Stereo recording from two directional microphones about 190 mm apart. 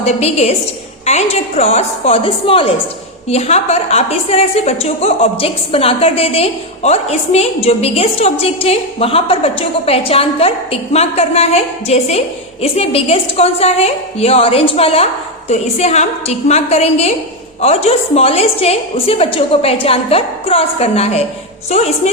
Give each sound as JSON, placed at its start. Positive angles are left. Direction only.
{"t": 0.0, "sound": "a woman's voice", "side_deg": 35}